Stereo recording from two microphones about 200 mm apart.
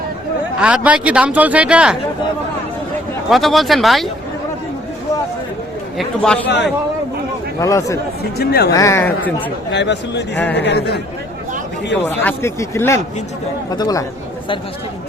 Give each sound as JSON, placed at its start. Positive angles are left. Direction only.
{"t": 0.9, "sound": "speech", "side_deg": -5}
{"t": 3.2, "sound": "speech", "side_deg": 0}
{"t": 6.0, "sound": "speech", "side_deg": 5}
{"t": 7.6, "sound": "speech", "side_deg": 15}
{"t": 8.2, "sound": "speech", "side_deg": 55}
{"t": 8.7, "sound": "speech", "side_deg": 15}
{"t": 9.7, "sound": "speech", "side_deg": 60}
{"t": 10.3, "sound": "speech", "side_deg": 10}
{"t": 10.6, "sound": "speech", "side_deg": 55}
{"t": 12.0, "sound": "a man's voice", "side_deg": 10}